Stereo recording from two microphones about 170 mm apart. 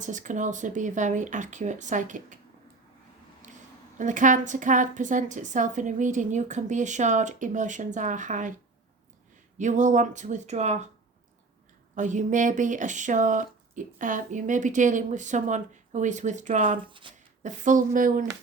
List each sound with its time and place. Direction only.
0.0 s speech: 45° right (ahead or behind)
3.9 s speech: 50° right (ahead or behind)
11.9 s speech: 45° right (ahead or behind)
16.7 s speech: 30° right (ahead or behind)
17.4 s speech: 50° right (ahead or behind)